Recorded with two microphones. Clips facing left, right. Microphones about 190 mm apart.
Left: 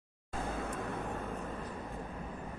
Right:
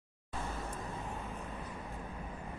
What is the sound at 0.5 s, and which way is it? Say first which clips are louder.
Vehicle: left 6 dB; 60° left (ahead or behind).